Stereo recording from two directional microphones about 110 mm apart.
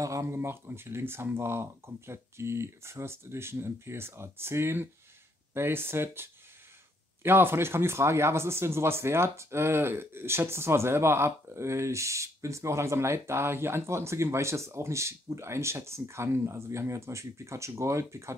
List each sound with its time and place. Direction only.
0.0 s speech: 30° right (ahead or behind)